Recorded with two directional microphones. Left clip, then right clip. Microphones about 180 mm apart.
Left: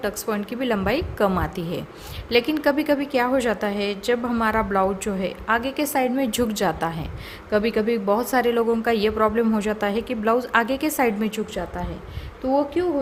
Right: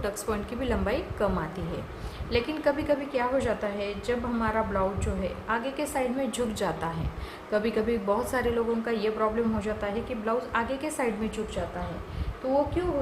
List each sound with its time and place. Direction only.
0.0 s a woman's voice: 40° left (ahead or behind)
12.8 s a woman's voice: 50° left (ahead or behind)